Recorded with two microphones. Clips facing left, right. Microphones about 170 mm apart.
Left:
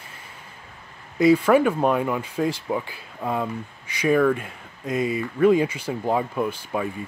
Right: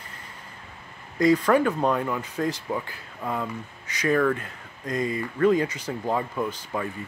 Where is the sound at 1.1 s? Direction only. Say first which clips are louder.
Left 3 dB; 10° left (ahead or behind).